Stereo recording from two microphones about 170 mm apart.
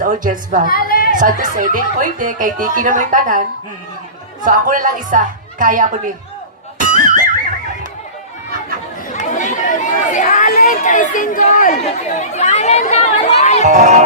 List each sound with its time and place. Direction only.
0.0 s speech: 50° right (ahead or behind)
0.7 s a sound: 60° left (ahead or behind)
1.1 s speech: 50° right (ahead or behind)
4.4 s speech: 50° right (ahead or behind)
6.7 s music: 50° right (ahead or behind)
9.1 s speech: 45° left (ahead or behind)
13.7 s speech: 45° right (ahead or behind)